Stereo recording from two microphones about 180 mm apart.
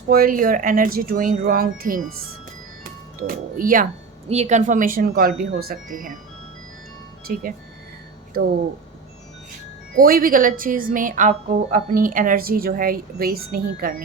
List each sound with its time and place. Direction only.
0.1 s speech: 50° right (ahead or behind)
3.2 s speech: 50° right (ahead or behind)
4.3 s speech: 40° right (ahead or behind)
7.3 s speech: 55° right (ahead or behind)